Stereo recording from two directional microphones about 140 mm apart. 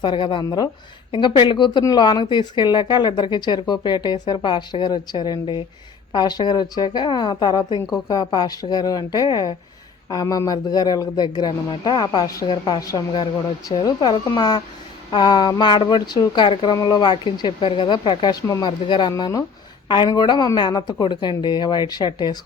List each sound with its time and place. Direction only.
0.0 s a woman's voice: 35° left (ahead or behind)